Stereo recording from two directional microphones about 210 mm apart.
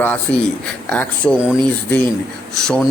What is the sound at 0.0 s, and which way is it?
A man's voice, 5° left (ahead or behind).